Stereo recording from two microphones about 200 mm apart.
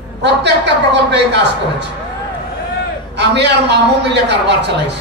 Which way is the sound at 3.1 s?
60° right (ahead or behind).